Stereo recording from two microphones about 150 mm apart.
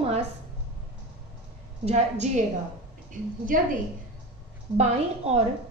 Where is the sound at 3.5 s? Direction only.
65° right (ahead or behind).